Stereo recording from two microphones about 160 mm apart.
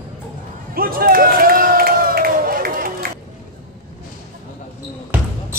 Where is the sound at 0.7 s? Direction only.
65° right (ahead or behind).